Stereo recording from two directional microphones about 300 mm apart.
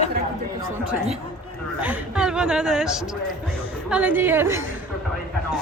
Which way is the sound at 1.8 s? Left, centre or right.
Centre.